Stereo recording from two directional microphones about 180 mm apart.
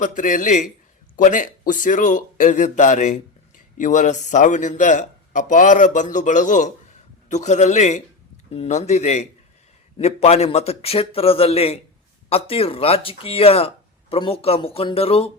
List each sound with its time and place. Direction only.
0.0 s a man's voice: 45° left (ahead or behind)